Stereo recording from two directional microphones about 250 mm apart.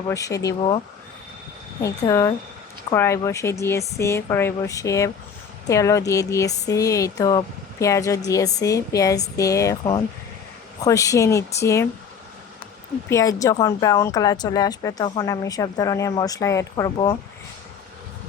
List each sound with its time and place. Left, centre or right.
0.1 s speech: centre
1.8 s speech: centre
13.1 s speech: centre